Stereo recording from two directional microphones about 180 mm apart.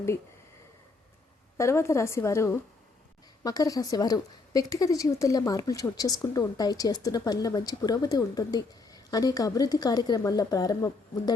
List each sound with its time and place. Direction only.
1.5 s a woman's voice: 15° left (ahead or behind)